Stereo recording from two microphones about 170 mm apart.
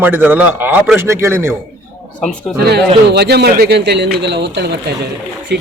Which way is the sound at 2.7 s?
75° right (ahead or behind).